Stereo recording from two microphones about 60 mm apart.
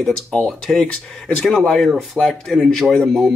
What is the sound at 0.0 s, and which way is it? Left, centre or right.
Speech, centre.